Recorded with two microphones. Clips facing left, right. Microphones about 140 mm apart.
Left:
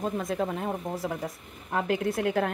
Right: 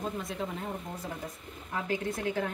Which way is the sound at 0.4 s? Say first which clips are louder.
Left 6 dB; 80° left.